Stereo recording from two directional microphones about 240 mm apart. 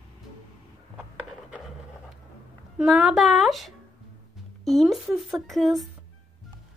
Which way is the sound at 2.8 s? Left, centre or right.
Centre.